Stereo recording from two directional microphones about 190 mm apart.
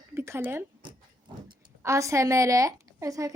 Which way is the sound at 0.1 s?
15° right (ahead or behind).